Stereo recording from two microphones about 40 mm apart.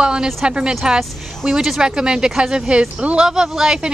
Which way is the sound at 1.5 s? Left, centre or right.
Centre.